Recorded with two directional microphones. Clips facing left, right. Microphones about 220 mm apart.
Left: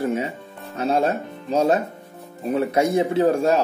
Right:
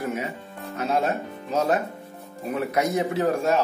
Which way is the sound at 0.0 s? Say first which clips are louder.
Left 5 dB; 30° left (ahead or behind).